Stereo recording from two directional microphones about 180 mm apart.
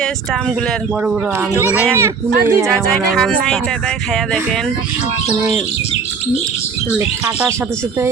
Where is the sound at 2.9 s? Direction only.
5° left (ahead or behind).